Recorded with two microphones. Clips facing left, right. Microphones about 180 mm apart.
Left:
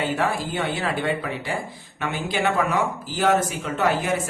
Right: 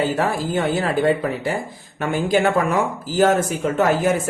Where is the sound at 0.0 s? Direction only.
40° right (ahead or behind).